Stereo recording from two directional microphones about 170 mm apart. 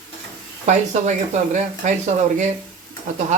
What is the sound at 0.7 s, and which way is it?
Speech, 40° right (ahead or behind).